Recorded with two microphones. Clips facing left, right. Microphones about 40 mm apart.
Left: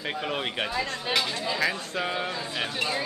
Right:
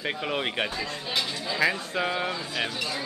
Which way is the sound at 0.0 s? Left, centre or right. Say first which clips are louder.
Right 1 dB; centre.